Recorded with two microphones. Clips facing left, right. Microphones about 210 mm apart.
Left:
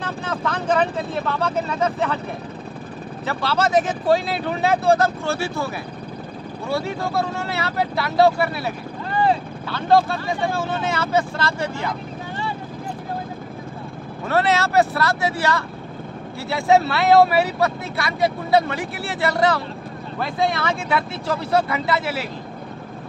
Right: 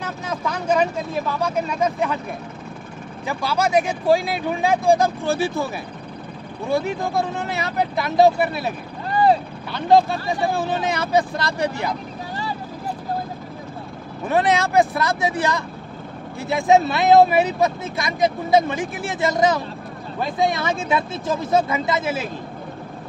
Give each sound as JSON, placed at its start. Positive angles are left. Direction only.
{"t": 0.0, "sound": "speech", "side_deg": -10}
{"t": 3.3, "sound": "speech", "side_deg": -10}
{"t": 6.7, "sound": "speech", "side_deg": -15}
{"t": 14.2, "sound": "speech", "side_deg": -15}